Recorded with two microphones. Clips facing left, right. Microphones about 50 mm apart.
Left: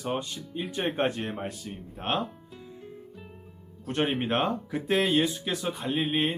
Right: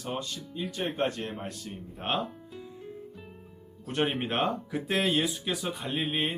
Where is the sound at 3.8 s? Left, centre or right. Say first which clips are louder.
Left 1 dB; centre.